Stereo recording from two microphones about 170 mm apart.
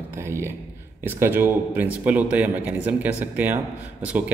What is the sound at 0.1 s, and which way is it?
Speech, 15° right (ahead or behind).